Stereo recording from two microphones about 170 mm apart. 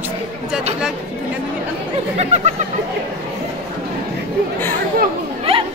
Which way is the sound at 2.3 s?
45° right (ahead or behind).